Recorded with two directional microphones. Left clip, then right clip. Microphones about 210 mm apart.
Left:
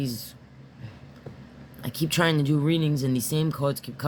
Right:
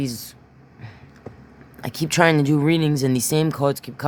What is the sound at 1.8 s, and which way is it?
Speech, 45° right (ahead or behind).